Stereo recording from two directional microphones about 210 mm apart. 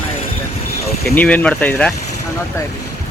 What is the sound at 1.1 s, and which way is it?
Speech, 5° left (ahead or behind).